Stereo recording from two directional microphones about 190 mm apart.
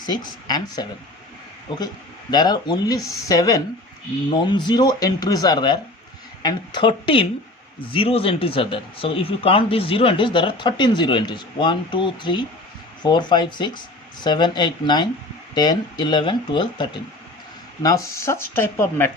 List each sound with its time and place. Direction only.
0.0 s speech: 20° left (ahead or behind)